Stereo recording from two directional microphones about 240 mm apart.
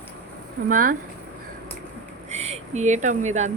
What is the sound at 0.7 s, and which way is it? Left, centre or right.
Speech, right.